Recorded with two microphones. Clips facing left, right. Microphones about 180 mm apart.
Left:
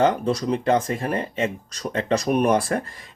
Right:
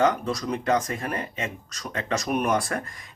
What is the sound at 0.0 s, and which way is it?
Speech, 30° left (ahead or behind).